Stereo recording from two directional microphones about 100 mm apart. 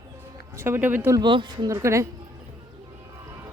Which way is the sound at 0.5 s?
25° right (ahead or behind).